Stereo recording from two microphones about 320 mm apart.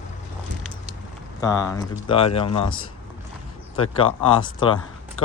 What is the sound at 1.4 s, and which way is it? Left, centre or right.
Speech, centre.